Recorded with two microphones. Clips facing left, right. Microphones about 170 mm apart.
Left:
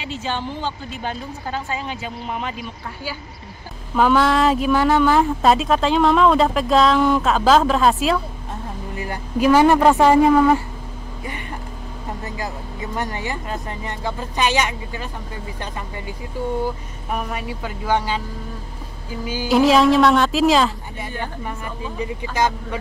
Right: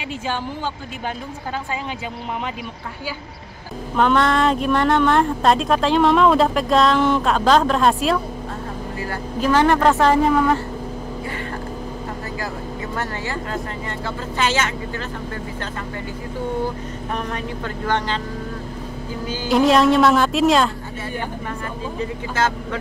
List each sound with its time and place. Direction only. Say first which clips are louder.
0.1 s speech: even; 10° right (ahead or behind)
3.9 s speech: left 1 dB; 5° left (ahead or behind)
8.9 s speech: left 3 dB; 20° left (ahead or behind)
12.9 s speech: left 2 dB; 15° left (ahead or behind)
17.1 s speech: left 1 dB; 10° left (ahead or behind)
19.5 s speech: left 1 dB; centre (ahead or behind)
22.0 s speech: left 1 dB; 15° left (ahead or behind)